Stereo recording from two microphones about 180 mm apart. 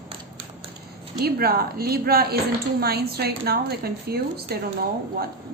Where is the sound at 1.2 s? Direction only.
60° right (ahead or behind).